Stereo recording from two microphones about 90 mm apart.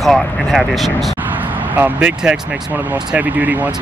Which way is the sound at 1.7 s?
15° right (ahead or behind).